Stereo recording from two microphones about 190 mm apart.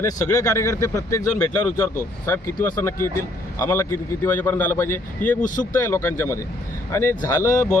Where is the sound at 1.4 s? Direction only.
5° left (ahead or behind).